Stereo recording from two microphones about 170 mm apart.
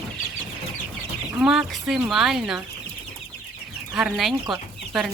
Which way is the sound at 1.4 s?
5° right (ahead or behind).